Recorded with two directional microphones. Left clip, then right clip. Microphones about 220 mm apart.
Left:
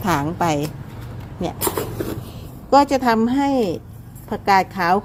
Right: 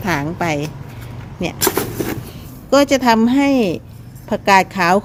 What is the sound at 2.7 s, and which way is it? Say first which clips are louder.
A woman's voice: right 2 dB; 10° right (ahead or behind).